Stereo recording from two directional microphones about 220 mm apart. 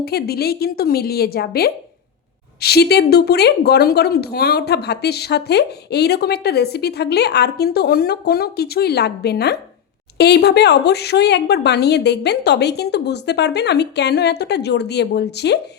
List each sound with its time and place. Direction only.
0.0 s a woman's voice: 45° left (ahead or behind)